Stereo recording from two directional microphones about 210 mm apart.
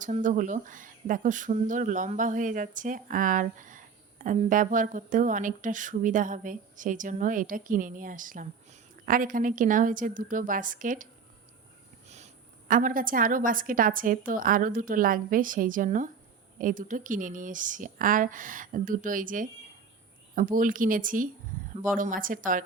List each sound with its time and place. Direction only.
0.0 s speech: 35° right (ahead or behind)